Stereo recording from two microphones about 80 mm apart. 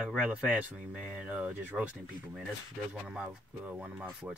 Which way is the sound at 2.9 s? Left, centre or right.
Centre.